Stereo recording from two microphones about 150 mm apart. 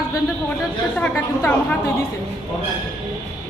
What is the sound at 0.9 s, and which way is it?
Speech, 10° left (ahead or behind).